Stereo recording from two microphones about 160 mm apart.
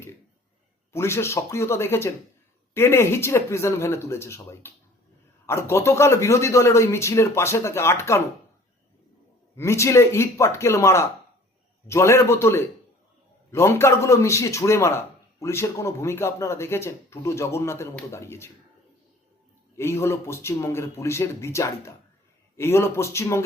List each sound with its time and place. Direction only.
0.9 s a man's voice: 15° left (ahead or behind)
9.6 s a man's voice: 15° left (ahead or behind)
19.7 s a man's voice: 15° left (ahead or behind)